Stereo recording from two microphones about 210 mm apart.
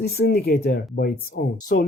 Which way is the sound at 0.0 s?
45° left (ahead or behind).